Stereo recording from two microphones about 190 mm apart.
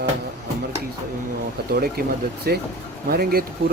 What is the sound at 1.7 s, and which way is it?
Speech, 55° right (ahead or behind).